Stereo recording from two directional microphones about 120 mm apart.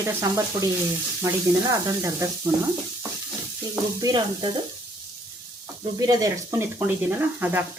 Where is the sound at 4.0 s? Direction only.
35° right (ahead or behind).